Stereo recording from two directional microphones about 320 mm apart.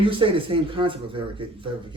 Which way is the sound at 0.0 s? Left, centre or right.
Centre.